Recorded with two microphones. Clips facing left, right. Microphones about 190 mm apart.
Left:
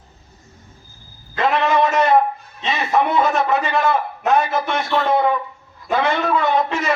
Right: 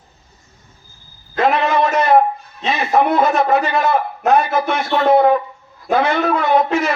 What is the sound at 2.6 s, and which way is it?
A man's voice, 45° right (ahead or behind).